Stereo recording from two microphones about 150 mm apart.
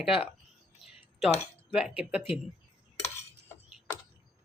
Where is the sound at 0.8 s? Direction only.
Centre (ahead or behind).